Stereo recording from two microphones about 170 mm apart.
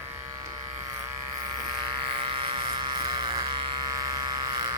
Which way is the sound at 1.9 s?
30° right (ahead or behind).